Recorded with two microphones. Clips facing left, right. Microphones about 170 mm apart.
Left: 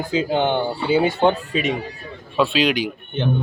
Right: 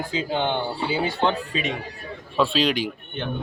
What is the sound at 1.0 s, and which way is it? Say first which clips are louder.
Speech: left 5 dB; 20° left (ahead or behind).